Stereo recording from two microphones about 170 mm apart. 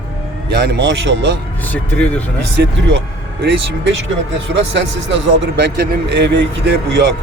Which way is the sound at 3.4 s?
90° right.